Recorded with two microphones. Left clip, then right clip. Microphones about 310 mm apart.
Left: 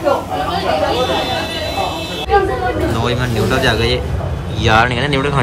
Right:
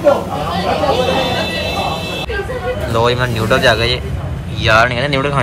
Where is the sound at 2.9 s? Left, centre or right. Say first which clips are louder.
Right 4 dB; centre.